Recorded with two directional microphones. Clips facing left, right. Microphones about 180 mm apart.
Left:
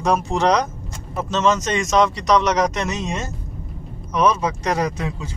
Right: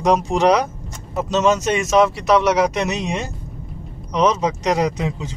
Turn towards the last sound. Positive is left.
turn(degrees=-20)  # may be behind; listen again after turning